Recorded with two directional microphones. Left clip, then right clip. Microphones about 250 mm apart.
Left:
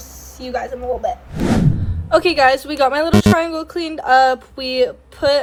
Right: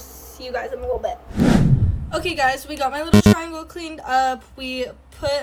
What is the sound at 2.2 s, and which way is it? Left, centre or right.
Speech, centre.